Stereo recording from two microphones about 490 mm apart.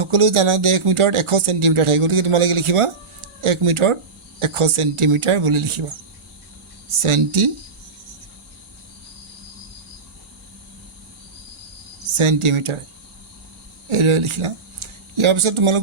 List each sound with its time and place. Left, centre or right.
0.0 s speech: right
7.0 s speech: right
12.1 s speech: right
13.9 s speech: right